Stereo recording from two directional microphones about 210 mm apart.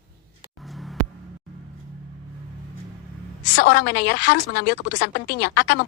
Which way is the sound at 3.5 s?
55° left (ahead or behind).